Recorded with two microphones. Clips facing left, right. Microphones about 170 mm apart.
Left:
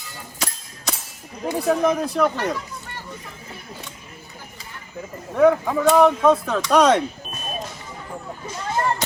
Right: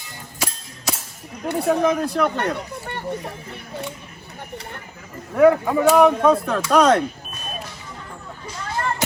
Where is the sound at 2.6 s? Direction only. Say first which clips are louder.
Right 4 dB; 65° right (ahead or behind).